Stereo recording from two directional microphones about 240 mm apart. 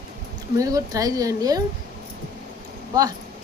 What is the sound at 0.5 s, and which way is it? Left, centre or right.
Speech, centre.